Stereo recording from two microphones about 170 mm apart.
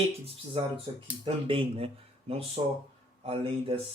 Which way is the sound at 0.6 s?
35° right (ahead or behind).